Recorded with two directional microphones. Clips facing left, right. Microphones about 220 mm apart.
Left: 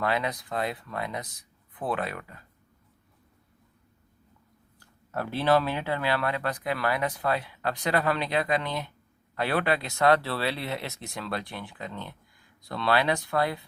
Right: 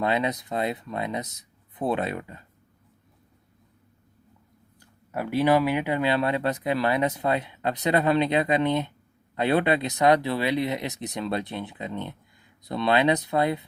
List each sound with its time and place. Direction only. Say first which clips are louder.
0.0 s speech: right 3 dB; 20° right (ahead or behind)
4.8 s speech: right 2 dB; 15° right (ahead or behind)